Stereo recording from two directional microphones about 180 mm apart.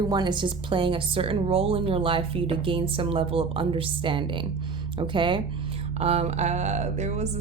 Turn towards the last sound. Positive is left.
turn(degrees=-40)  # may be behind; listen again after turning